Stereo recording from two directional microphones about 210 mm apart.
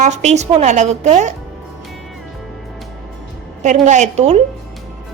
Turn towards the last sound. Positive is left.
turn(degrees=-30)  # may be behind; listen again after turning